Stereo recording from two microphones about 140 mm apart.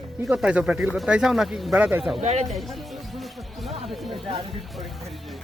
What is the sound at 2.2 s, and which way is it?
Speech, 55° right (ahead or behind).